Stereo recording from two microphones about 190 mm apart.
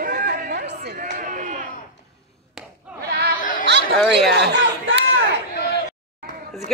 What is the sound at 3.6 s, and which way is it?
Chatter, 65° right (ahead or behind).